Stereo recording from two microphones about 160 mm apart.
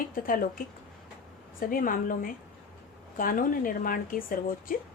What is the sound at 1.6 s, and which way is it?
A woman's voice, 60° left (ahead or behind).